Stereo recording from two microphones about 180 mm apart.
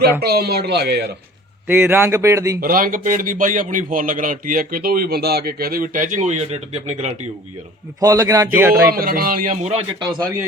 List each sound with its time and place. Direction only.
0.2 s speech: 60° right (ahead or behind)
1.6 s speech: 10° right (ahead or behind)
2.6 s a man's voice: 50° right (ahead or behind)
8.0 s speech: 20° right (ahead or behind)
8.7 s a man's voice: 55° right (ahead or behind)